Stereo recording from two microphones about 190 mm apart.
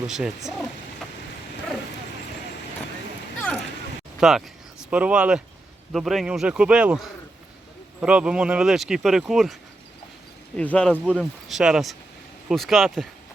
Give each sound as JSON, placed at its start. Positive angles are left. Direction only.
{"t": 0.1, "sound": "speech", "side_deg": 0}
{"t": 4.2, "sound": "speech", "side_deg": 0}
{"t": 10.6, "sound": "speech", "side_deg": 5}